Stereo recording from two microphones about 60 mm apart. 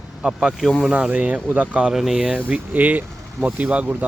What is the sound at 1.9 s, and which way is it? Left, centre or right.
Speech, centre.